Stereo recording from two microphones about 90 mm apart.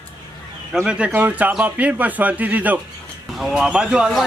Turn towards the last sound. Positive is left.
turn(degrees=-10)  # may be behind; listen again after turning